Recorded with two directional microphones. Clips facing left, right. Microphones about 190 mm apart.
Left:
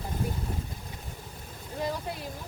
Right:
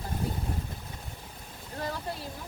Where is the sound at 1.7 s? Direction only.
15° left (ahead or behind).